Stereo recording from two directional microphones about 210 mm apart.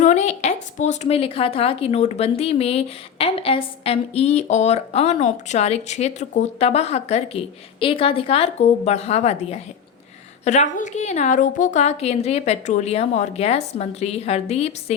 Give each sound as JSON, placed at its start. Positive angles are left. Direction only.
{"t": 0.0, "sound": "a woman's voice", "side_deg": 35}